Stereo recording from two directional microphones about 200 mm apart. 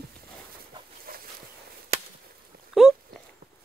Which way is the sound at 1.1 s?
45° right (ahead or behind).